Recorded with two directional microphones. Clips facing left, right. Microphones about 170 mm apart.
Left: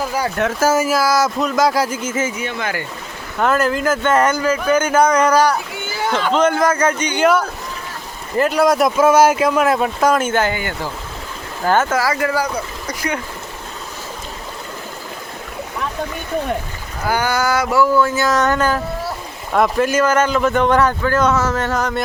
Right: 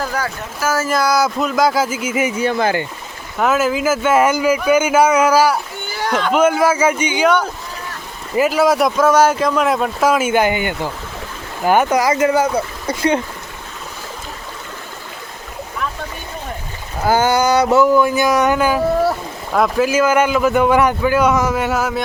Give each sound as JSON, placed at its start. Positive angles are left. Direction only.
{"t": 0.4, "sound": "speech", "side_deg": 70}
{"t": 0.9, "sound": "speech", "side_deg": 5}
{"t": 2.3, "sound": "speech", "side_deg": -35}
{"t": 3.3, "sound": "a man's voice", "side_deg": -5}
{"t": 8.4, "sound": "speech", "side_deg": -5}
{"t": 9.0, "sound": "speech", "side_deg": 10}
{"t": 17.1, "sound": "a man's voice", "side_deg": -25}